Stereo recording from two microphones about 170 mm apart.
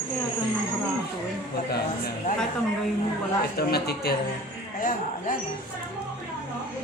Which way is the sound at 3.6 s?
70° left (ahead or behind).